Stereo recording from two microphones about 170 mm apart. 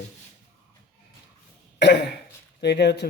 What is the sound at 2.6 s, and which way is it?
Speech, 80° left.